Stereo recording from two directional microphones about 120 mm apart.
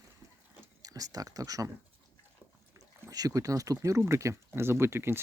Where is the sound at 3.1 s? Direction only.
30° right (ahead or behind).